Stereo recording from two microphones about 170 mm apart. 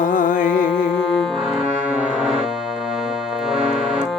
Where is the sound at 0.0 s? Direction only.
50° left (ahead or behind).